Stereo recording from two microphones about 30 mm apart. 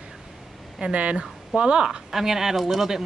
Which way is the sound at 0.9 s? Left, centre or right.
Right.